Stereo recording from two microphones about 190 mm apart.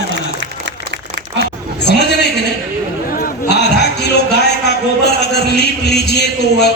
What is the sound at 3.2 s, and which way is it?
Chatter, 60° left (ahead or behind).